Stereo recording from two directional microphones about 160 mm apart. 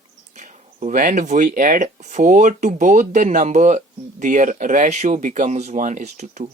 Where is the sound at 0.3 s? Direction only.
50° right (ahead or behind).